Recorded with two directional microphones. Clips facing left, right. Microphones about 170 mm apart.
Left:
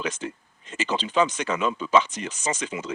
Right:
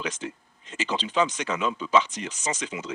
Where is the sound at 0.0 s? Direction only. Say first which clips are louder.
Left 2 dB; 50° left (ahead or behind).